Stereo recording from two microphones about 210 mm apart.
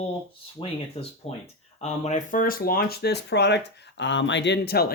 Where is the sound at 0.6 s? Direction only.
25° left (ahead or behind).